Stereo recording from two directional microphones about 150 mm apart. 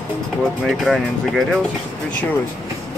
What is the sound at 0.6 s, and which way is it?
Speech, centre (ahead or behind).